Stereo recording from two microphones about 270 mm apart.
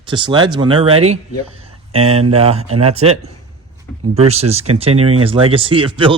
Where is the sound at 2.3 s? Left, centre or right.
Right.